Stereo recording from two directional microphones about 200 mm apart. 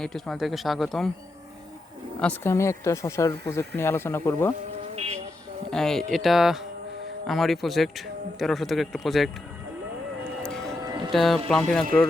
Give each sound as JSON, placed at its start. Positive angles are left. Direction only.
{"t": 0.0, "sound": "speech", "side_deg": 0}
{"t": 2.1, "sound": "speech", "side_deg": 5}
{"t": 5.7, "sound": "speech", "side_deg": 0}
{"t": 10.8, "sound": "music", "side_deg": -20}
{"t": 11.1, "sound": "speech", "side_deg": 0}